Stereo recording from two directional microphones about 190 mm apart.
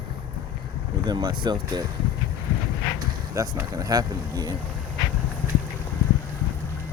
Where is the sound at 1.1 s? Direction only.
20° right (ahead or behind).